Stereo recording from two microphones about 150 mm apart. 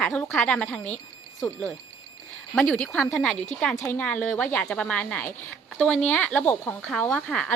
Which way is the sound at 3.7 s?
15° left (ahead or behind).